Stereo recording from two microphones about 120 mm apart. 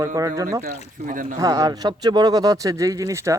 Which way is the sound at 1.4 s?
30° right (ahead or behind).